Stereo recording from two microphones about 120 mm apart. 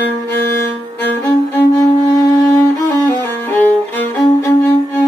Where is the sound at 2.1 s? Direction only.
25° left (ahead or behind).